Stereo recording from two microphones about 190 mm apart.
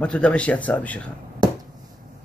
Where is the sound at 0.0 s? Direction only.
5° left (ahead or behind).